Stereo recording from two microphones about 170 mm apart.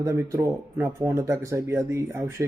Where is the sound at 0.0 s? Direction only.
15° right (ahead or behind).